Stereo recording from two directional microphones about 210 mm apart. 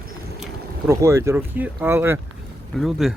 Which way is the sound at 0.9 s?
15° right (ahead or behind).